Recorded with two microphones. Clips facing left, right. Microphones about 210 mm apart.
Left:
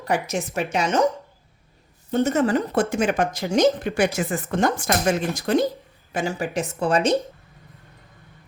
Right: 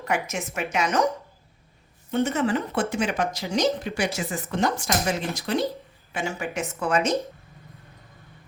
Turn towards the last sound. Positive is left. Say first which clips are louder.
# left 4 dB
turn(degrees=30)  # may be behind; listen again after turning